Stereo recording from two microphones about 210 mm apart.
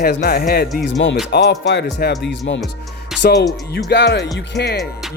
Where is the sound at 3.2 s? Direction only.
90° left.